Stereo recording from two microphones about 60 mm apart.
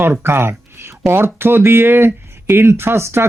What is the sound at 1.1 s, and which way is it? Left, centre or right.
Music, right.